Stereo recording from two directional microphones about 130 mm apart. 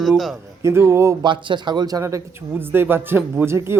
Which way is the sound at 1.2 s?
40° right (ahead or behind).